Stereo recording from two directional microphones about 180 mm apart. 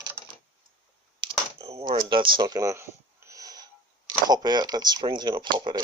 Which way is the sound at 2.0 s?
25° right (ahead or behind).